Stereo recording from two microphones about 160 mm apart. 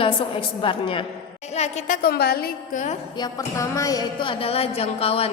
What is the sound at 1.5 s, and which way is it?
Speech, 45° left (ahead or behind).